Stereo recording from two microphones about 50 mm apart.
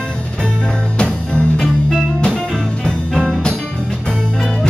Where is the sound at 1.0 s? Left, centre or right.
Centre.